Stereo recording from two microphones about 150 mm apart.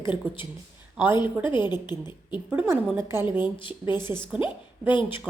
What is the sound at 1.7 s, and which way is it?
Speech, 30° left (ahead or behind).